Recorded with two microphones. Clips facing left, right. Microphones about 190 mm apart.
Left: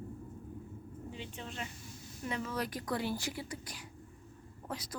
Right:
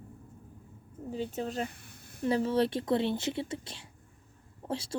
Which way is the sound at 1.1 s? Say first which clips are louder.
Right 12 dB; 40° right (ahead or behind).